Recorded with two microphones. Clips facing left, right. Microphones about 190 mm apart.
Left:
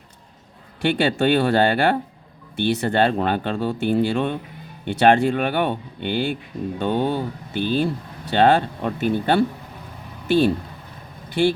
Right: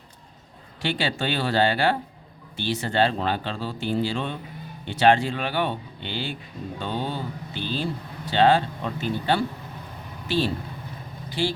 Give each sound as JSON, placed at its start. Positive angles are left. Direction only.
{"t": 0.8, "sound": "speech", "side_deg": 55}